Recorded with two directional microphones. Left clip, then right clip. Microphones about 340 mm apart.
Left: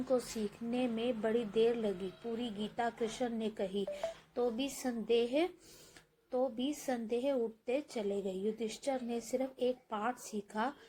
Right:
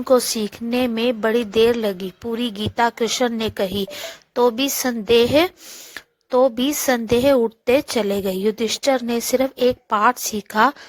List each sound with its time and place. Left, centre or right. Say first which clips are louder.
0.7 s a woman's voice: right 16 dB; right